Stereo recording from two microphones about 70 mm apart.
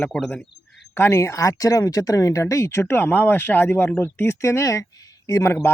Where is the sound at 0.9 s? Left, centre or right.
Left.